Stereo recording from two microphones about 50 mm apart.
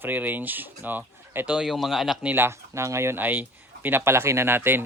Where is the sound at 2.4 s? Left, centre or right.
Right.